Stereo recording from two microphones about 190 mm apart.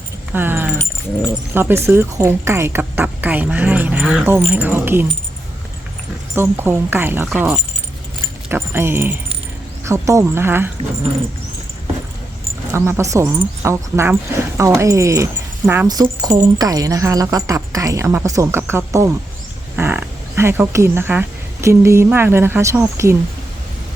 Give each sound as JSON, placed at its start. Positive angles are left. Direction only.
{"t": 0.3, "sound": "keys jangling", "side_deg": -10}
{"t": 1.5, "sound": "speech", "side_deg": -10}
{"t": 6.3, "sound": "speech", "side_deg": -10}
{"t": 12.7, "sound": "speech", "side_deg": -15}